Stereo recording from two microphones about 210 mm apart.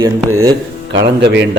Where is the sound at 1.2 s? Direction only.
55° right (ahead or behind).